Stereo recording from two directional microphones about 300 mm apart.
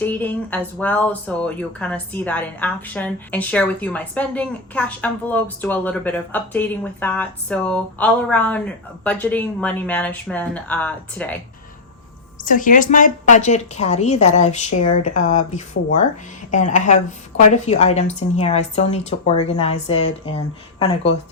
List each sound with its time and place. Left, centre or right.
0.0 s a woman's voice: centre
12.5 s a woman's voice: left